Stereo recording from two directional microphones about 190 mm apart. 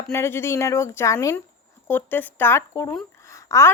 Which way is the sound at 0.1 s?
15° left (ahead or behind).